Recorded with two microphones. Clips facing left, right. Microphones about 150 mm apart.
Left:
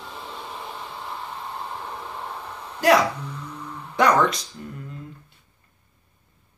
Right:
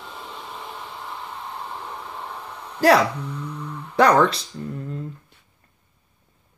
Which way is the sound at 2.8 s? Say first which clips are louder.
Right 2 dB; 35° right (ahead or behind).